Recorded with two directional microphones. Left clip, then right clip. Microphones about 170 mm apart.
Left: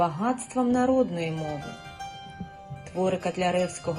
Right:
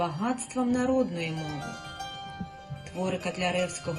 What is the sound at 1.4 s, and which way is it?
Speech, 20° right (ahead or behind).